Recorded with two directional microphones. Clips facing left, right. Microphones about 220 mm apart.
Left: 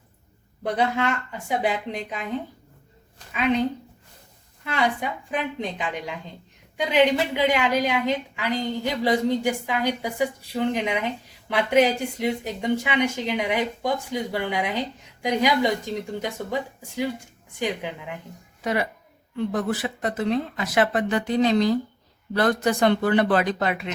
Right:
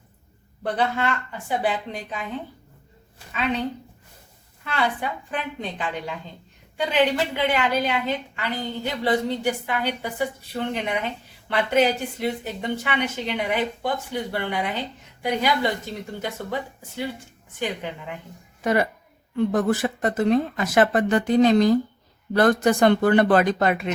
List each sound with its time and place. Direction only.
0.6 s a woman's voice: 10° left (ahead or behind)
3.3 s a woman's voice: 10° left (ahead or behind)
18.6 s speech: 50° right (ahead or behind)